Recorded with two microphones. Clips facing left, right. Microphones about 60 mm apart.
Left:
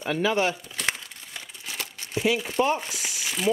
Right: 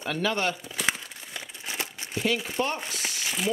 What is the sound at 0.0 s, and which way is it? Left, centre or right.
Speech, centre.